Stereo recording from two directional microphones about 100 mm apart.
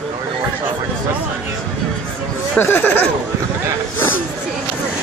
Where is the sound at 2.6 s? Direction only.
20° left (ahead or behind).